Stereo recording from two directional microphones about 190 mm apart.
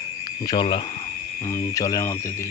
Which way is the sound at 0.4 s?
25° left (ahead or behind).